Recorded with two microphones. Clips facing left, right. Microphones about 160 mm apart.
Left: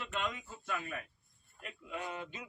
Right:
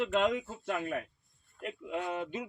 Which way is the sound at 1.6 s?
60° right (ahead or behind).